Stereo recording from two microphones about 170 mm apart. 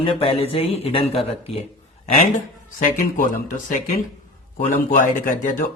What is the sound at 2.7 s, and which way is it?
Speech, 50° left (ahead or behind).